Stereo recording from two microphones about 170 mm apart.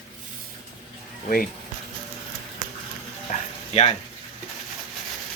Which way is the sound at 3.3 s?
40° left (ahead or behind).